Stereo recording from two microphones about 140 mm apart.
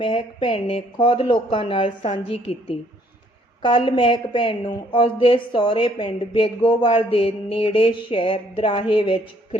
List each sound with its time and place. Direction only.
0.0 s a woman's voice: 40° left (ahead or behind)